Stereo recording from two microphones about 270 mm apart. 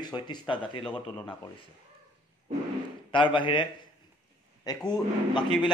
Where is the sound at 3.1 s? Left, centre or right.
Centre.